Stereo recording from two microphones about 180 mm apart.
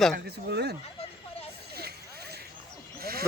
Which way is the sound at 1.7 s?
60° right (ahead or behind).